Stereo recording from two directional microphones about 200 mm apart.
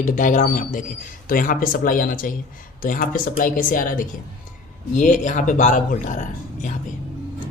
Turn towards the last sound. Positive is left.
turn(degrees=40)  # may be behind; listen again after turning